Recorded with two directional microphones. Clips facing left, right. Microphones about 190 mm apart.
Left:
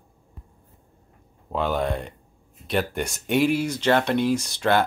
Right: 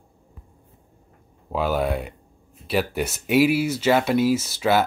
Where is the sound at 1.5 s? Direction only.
5° right (ahead or behind).